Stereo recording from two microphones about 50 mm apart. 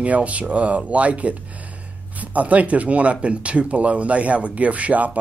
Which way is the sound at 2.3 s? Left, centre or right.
Right.